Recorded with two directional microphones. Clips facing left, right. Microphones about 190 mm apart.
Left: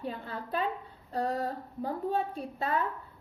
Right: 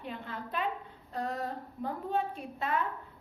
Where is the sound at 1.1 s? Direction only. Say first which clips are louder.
Left 4 dB; 35° left (ahead or behind).